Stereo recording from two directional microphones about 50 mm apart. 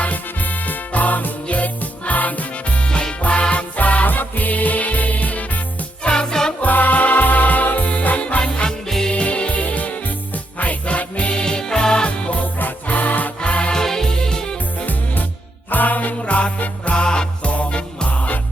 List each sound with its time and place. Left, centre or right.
0.0 s music: left
6.0 s music: centre
6.6 s music: left
8.9 s music: centre
9.1 s music: left
13.4 s music: left
13.8 s music: centre
14.8 s music: left